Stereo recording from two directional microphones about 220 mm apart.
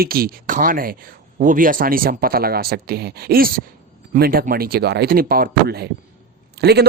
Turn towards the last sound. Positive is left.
turn(degrees=-50)  # may be behind; listen again after turning